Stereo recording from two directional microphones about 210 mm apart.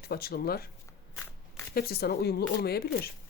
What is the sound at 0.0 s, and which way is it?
Speech, 50° left (ahead or behind).